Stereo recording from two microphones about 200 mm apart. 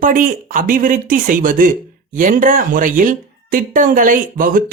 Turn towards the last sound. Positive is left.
turn(degrees=-45)  # may be behind; listen again after turning